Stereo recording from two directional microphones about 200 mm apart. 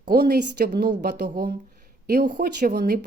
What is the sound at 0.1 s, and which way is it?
Speech, 50° right (ahead or behind).